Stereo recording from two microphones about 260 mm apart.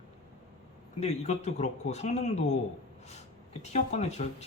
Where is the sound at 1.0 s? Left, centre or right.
Left.